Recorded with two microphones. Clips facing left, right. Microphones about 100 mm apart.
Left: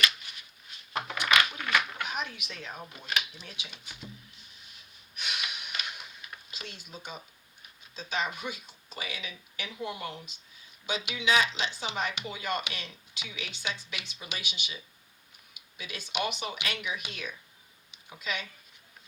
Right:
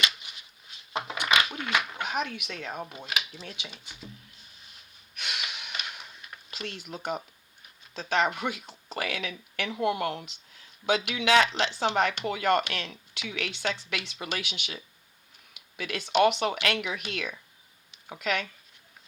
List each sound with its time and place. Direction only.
0.2 s a sound: 20° right (ahead or behind)
0.9 s crushing: 20° right (ahead or behind)
1.3 s dog: 20° right (ahead or behind)
2.0 s speech: 60° right (ahead or behind)
5.1 s snort: 65° right (ahead or behind)
6.5 s speech: 65° right (ahead or behind)
15.5 s a sound: 65° right (ahead or behind)
16.2 s speech: 65° right (ahead or behind)